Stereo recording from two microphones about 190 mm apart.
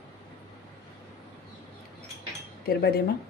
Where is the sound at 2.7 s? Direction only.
55° left (ahead or behind).